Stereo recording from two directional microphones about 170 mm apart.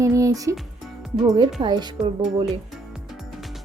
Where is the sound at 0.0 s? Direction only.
20° right (ahead or behind).